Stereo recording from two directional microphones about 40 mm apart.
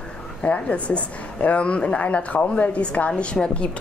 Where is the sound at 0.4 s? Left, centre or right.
Left.